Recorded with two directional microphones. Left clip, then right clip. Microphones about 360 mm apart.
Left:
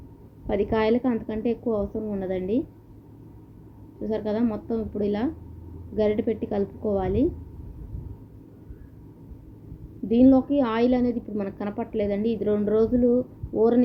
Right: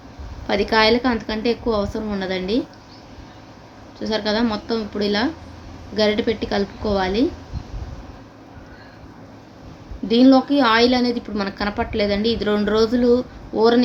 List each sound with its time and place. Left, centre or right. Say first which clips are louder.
0.4 s a woman's voice: right 7 dB; centre
4.0 s a woman's voice: right 5 dB; centre
10.1 s a woman's voice: right 5 dB; centre